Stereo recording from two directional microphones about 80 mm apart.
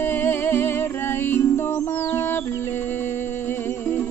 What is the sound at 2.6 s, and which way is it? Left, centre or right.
Music, left.